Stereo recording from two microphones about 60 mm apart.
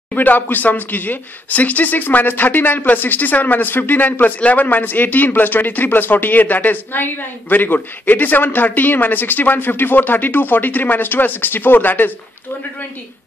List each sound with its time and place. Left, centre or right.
0.1 s speech: left